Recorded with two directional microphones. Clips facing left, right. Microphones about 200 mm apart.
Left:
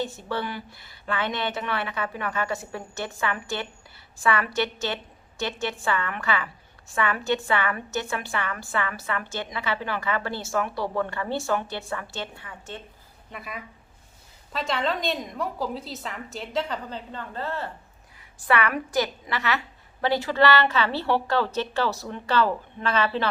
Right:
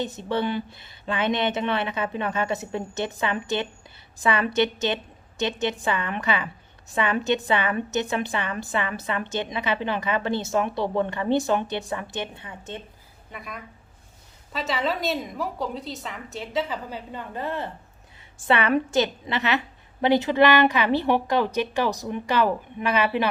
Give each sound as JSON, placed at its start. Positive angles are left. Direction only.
{"t": 0.0, "sound": "a woman's voice", "side_deg": -20}
{"t": 13.3, "sound": "a woman's voice", "side_deg": 0}